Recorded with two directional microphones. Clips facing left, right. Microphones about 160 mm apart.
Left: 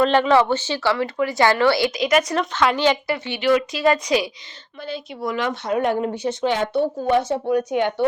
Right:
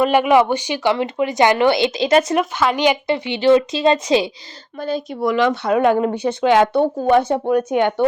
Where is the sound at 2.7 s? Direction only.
15° right (ahead or behind).